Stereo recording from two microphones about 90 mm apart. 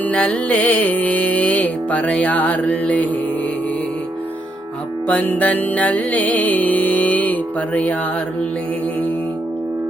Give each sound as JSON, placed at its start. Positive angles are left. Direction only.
{"t": 0.0, "sound": "music", "side_deg": 15}
{"t": 5.0, "sound": "music", "side_deg": 20}